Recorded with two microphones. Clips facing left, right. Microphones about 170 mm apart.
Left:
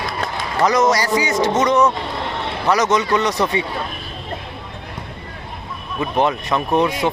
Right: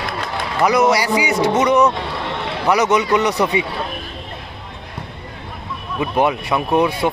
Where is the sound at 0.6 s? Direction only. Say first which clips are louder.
Right 1 dB; 15° right (ahead or behind).